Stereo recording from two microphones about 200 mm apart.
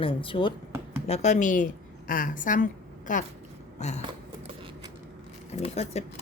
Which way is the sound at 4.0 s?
25° right (ahead or behind).